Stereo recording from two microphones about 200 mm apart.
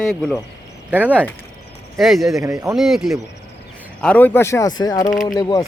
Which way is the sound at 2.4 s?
15° right (ahead or behind).